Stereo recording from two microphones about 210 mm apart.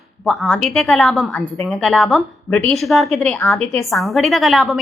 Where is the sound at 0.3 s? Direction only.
Centre (ahead or behind).